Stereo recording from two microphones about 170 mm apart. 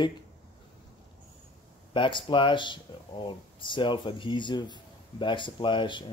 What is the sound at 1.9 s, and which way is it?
Speech, 30° left (ahead or behind).